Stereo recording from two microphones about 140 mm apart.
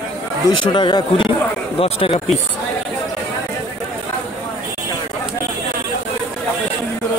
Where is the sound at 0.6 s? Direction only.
35° left (ahead or behind).